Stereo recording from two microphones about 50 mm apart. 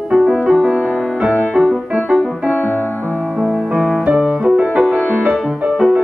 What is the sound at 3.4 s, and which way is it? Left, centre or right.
Music, centre.